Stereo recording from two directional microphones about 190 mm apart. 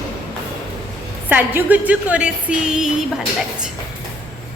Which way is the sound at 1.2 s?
10° right (ahead or behind).